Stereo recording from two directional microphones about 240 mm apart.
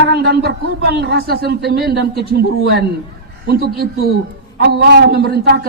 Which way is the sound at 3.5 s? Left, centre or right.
Right.